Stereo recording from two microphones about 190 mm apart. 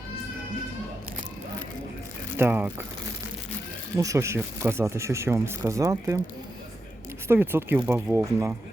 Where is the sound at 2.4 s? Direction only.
10° right (ahead or behind).